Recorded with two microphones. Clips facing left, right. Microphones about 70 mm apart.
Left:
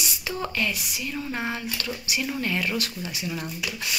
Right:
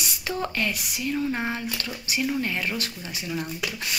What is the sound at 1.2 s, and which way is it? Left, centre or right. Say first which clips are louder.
Speech: right 2 dB; centre.